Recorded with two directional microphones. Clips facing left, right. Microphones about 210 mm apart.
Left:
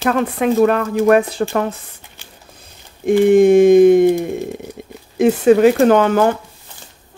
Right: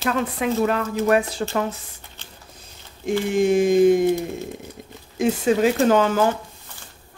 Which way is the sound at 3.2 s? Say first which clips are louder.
Left 9 dB; 55° left (ahead or behind).